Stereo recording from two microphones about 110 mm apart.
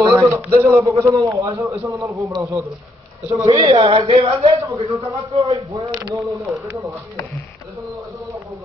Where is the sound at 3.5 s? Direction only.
60° right (ahead or behind).